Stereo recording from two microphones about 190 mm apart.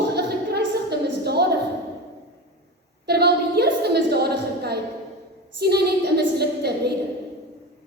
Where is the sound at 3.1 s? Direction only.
60° right (ahead or behind).